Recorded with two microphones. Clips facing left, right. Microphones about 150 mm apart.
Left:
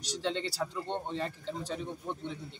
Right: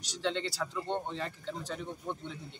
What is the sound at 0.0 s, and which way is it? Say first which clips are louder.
Speech: even; 35° left (ahead or behind).